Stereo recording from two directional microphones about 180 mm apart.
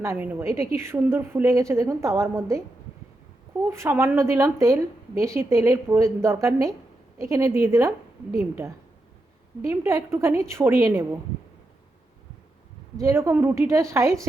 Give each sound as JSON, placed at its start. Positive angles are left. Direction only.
{"t": 0.0, "sound": "a woman's voice", "side_deg": -15}
{"t": 3.7, "sound": "a woman's voice", "side_deg": -15}
{"t": 13.0, "sound": "a woman's voice", "side_deg": -15}